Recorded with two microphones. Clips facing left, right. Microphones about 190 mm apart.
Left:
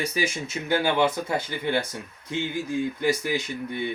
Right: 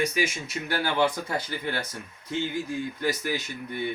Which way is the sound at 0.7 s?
15° left (ahead or behind).